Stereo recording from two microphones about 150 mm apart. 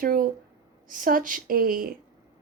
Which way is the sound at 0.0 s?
70° right (ahead or behind).